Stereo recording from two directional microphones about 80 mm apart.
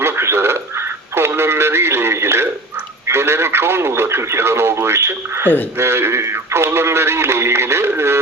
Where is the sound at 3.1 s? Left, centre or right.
Right.